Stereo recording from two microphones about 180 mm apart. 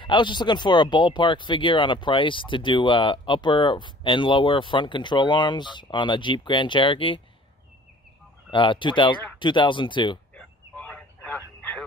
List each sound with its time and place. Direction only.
0.0 s speech: 25° left (ahead or behind)
8.5 s speech: 30° left (ahead or behind)
10.3 s a sound: 5° left (ahead or behind)